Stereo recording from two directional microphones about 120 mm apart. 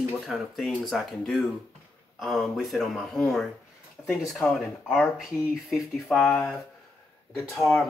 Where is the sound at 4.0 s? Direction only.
15° left (ahead or behind).